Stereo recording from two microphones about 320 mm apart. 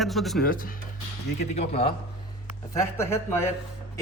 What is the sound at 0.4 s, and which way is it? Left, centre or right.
Speech, left.